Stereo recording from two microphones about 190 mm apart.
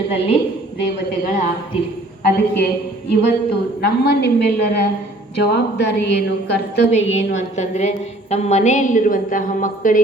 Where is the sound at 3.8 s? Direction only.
55° left (ahead or behind).